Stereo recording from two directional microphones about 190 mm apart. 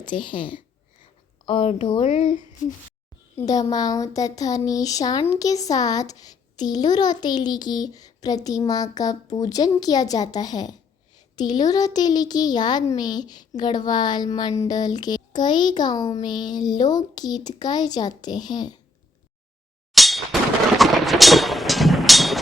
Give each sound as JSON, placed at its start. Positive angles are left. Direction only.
{"t": 0.0, "sound": "a child's voice", "side_deg": 25}
{"t": 3.3, "sound": "a child's voice", "side_deg": 20}
{"t": 19.9, "sound": "clang", "side_deg": 0}
{"t": 20.7, "sound": "music", "side_deg": 0}